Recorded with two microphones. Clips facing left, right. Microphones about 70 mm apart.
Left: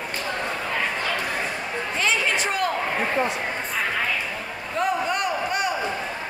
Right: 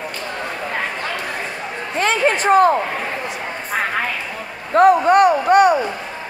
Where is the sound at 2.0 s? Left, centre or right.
Right.